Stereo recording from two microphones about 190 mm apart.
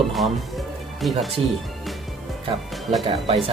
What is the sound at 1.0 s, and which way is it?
Speech, centre (ahead or behind).